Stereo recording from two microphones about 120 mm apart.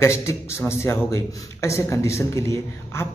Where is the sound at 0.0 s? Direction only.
25° left (ahead or behind).